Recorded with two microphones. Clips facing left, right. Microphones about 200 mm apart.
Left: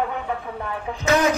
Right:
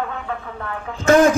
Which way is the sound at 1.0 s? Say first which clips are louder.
Right 6 dB; 50° right (ahead or behind).